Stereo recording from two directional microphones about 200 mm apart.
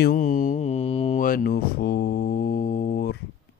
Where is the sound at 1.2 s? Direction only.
45° left (ahead or behind).